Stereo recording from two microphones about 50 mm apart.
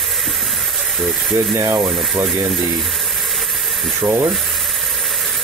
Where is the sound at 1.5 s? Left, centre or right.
Right.